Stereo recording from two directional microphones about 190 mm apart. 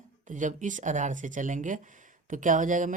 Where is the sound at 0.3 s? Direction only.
40° right (ahead or behind).